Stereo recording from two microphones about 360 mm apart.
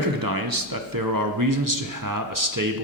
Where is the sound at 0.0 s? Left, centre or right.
Right.